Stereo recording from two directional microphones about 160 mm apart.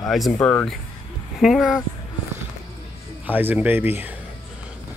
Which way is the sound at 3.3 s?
10° right (ahead or behind).